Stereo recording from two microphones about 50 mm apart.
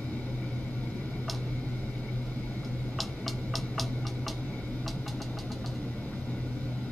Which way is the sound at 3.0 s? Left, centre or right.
Centre.